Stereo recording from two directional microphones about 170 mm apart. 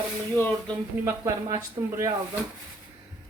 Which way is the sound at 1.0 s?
20° right (ahead or behind).